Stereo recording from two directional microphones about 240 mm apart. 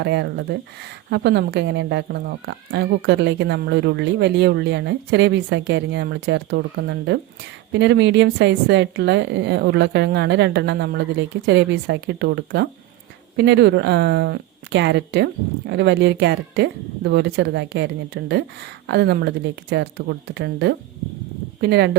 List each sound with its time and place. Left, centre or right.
0.0 s speech: right